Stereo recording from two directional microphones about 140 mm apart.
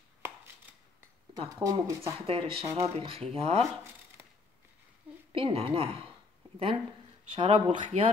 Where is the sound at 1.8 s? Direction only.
20° right (ahead or behind).